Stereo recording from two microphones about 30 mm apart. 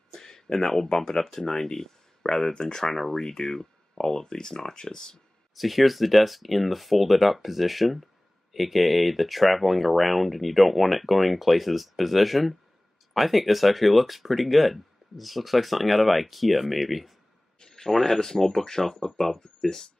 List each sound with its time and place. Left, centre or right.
0.1 s speech: centre
5.6 s speech: centre
17.6 s a sound: centre
17.9 s speech: centre